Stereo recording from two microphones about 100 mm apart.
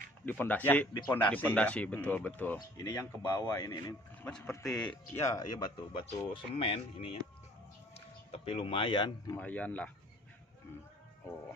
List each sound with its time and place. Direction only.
0.2 s speech: 15° left (ahead or behind)
2.8 s a man's voice: 35° left (ahead or behind)
3.2 s a man's voice: 45° left (ahead or behind)
4.6 s speech: 5° left (ahead or behind)
5.2 s a man's voice: 35° left (ahead or behind)
5.8 s speech: 60° left (ahead or behind)
7.9 s music: 80° left; by 9.1 s 55° left (ahead or behind)
9.4 s speech: 15° left (ahead or behind)